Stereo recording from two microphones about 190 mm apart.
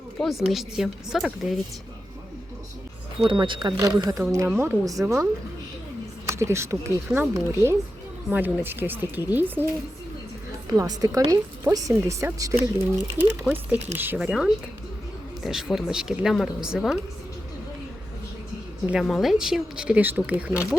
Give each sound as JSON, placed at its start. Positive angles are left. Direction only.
{"t": 0.2, "sound": "speech", "side_deg": 0}
{"t": 3.2, "sound": "speech", "side_deg": -25}
{"t": 6.3, "sound": "speech", "side_deg": -15}
{"t": 10.8, "sound": "speech", "side_deg": -20}
{"t": 18.9, "sound": "speech", "side_deg": 0}